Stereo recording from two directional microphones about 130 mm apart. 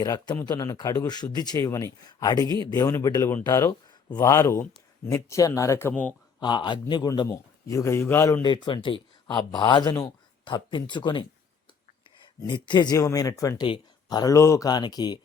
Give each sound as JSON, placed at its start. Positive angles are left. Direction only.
{"t": 0.0, "sound": "a man's voice", "side_deg": 30}
{"t": 5.9, "sound": "speech", "side_deg": 10}
{"t": 6.4, "sound": "a man's voice", "side_deg": 35}
{"t": 7.3, "sound": "speech", "side_deg": 25}
{"t": 8.4, "sound": "a man's voice", "side_deg": 35}
{"t": 12.4, "sound": "a man's voice", "side_deg": 35}